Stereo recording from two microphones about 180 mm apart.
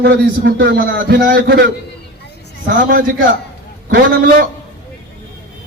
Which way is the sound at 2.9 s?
50° right (ahead or behind).